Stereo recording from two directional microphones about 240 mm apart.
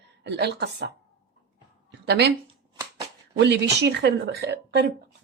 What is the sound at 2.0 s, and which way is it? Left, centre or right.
Speech, right.